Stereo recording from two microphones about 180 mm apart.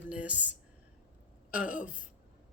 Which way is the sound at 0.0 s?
5° right (ahead or behind).